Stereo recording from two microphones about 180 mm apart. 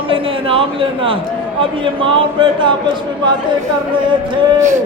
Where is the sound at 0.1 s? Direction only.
30° right (ahead or behind).